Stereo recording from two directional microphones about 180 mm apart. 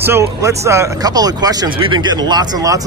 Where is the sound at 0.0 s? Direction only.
15° right (ahead or behind).